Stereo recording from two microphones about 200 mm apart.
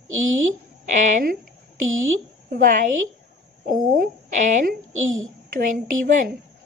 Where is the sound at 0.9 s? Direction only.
40° right (ahead or behind).